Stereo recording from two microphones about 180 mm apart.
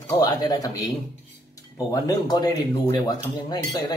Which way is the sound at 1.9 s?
20° left (ahead or behind).